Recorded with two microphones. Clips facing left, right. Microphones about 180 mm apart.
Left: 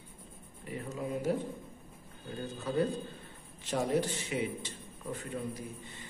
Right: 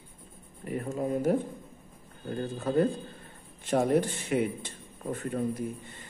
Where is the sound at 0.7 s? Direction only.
50° right (ahead or behind).